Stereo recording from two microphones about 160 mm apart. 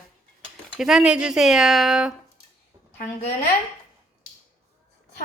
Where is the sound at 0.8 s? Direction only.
5° right (ahead or behind).